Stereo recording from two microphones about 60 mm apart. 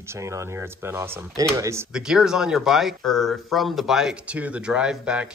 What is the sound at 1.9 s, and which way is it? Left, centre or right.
Speech, centre.